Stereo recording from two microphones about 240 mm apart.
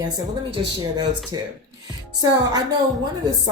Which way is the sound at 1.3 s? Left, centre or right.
Centre.